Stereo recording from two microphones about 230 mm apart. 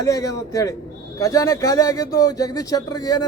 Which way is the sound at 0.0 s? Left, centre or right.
Centre.